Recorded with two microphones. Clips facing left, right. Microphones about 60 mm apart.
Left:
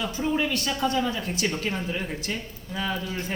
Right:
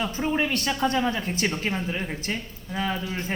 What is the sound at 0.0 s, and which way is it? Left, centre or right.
Speech, right.